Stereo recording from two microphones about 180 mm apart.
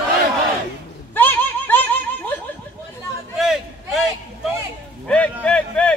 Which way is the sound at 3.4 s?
Centre (ahead or behind).